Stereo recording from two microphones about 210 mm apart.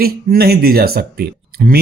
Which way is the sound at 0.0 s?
45° right (ahead or behind).